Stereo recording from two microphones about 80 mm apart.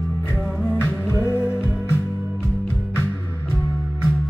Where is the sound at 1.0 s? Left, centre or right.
Left.